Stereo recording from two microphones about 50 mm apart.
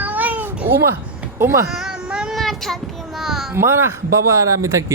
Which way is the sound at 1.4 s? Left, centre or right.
Right.